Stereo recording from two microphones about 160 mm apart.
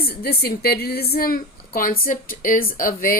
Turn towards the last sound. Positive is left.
turn(degrees=60)  # may be behind; listen again after turning